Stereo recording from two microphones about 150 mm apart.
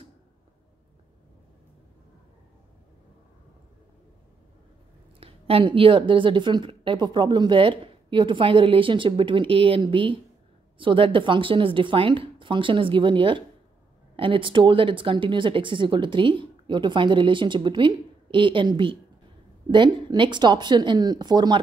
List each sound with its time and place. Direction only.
5.2 s a woman's voice: 35° right (ahead or behind)